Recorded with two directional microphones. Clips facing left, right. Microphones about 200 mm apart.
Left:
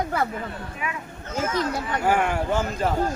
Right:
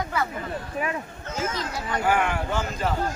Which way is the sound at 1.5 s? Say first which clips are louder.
Left 4 dB; 50° left (ahead or behind).